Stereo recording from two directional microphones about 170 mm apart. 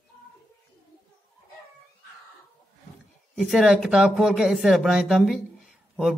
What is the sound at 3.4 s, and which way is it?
Speech, centre (ahead or behind).